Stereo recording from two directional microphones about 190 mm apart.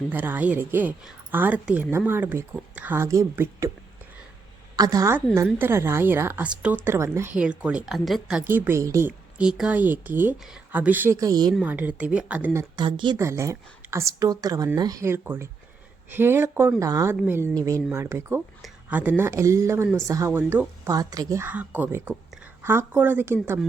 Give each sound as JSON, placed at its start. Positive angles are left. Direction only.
{"t": 0.1, "sound": "a woman's voice", "side_deg": -10}
{"t": 4.8, "sound": "a woman's voice", "side_deg": -20}
{"t": 11.5, "sound": "a woman's voice", "side_deg": -10}
{"t": 12.5, "sound": "a woman's voice", "side_deg": -25}